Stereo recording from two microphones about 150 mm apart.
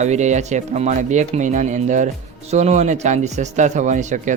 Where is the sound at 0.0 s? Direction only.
50° right (ahead or behind).